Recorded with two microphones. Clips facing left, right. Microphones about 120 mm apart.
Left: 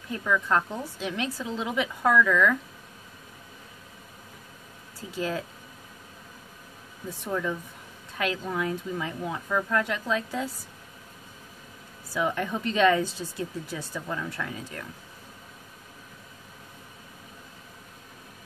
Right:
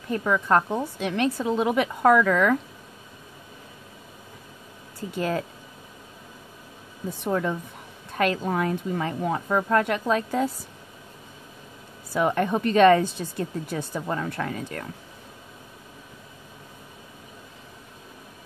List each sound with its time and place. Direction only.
0.1 s a woman's voice: 50° right (ahead or behind)
5.1 s a woman's voice: 55° right (ahead or behind)
7.2 s a woman's voice: 55° right (ahead or behind)
12.1 s a woman's voice: 55° right (ahead or behind)